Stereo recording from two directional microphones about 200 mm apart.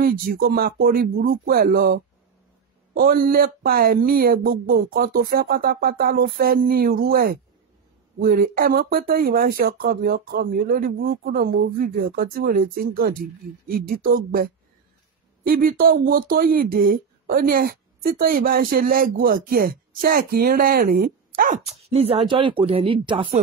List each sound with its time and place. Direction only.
0.0 s speech: 50° right (ahead or behind); by 23.4 s 30° right (ahead or behind)